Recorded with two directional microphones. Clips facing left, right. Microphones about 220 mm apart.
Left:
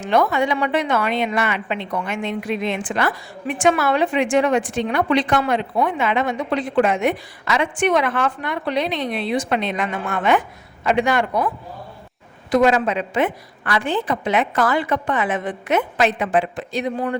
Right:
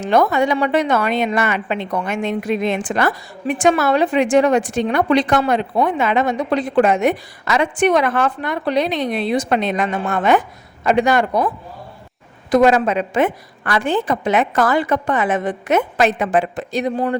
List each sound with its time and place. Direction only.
0.0 s a woman's voice: 40° right (ahead or behind)
12.5 s a woman's voice: 45° right (ahead or behind)